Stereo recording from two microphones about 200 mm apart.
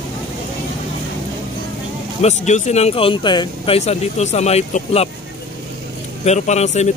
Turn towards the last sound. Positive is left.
turn(degrees=35)  # may be behind; listen again after turning